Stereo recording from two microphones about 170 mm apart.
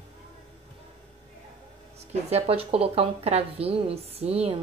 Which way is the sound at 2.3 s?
35° right (ahead or behind).